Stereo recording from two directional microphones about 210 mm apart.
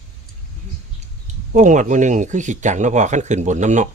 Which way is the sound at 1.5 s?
35° right (ahead or behind).